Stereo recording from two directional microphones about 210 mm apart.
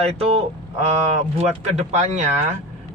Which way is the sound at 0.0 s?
30° right (ahead or behind).